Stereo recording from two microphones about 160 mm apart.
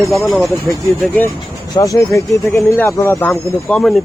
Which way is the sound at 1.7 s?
20° left (ahead or behind).